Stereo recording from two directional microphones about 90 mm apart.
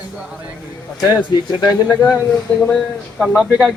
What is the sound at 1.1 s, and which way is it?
Speech, 50° left (ahead or behind).